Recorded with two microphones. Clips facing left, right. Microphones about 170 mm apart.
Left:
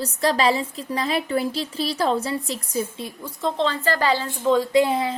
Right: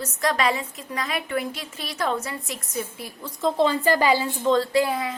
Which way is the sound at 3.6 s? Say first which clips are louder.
Right 2 dB; 15° right (ahead or behind).